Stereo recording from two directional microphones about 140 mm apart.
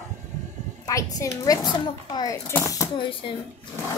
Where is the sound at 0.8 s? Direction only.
25° left (ahead or behind).